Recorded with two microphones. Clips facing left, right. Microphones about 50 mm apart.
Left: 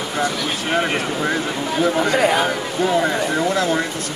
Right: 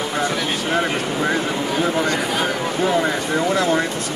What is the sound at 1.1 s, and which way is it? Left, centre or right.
Speech, centre.